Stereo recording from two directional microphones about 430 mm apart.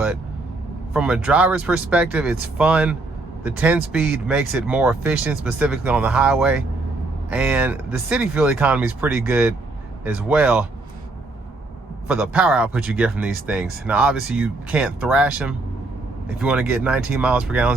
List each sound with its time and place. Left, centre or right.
0.9 s speech: centre
12.0 s speech: centre